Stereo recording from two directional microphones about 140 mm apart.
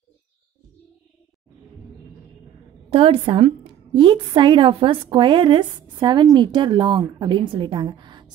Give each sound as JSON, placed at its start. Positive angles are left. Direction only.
{"t": 2.9, "sound": "a woman's voice", "side_deg": -40}